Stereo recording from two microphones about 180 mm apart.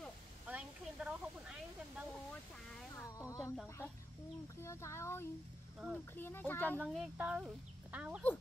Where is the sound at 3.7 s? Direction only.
15° left (ahead or behind).